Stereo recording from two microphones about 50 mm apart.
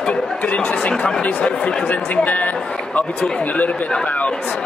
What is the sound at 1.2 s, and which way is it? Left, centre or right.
Speech, left.